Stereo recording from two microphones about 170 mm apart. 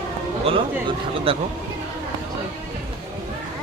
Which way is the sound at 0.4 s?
35° right (ahead or behind).